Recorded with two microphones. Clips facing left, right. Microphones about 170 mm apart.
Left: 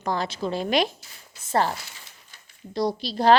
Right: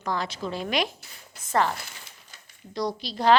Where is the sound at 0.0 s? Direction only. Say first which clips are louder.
Left 3 dB; 30° left (ahead or behind).